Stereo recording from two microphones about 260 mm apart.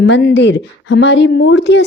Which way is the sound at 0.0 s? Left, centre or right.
Left.